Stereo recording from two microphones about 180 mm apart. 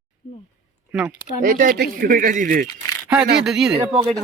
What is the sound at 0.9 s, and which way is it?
Speech, 5° right (ahead or behind).